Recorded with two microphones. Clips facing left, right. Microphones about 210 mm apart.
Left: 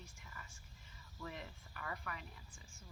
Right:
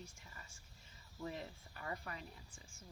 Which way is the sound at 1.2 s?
30° right (ahead or behind).